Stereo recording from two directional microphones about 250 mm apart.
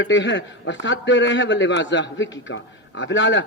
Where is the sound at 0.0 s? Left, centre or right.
Left.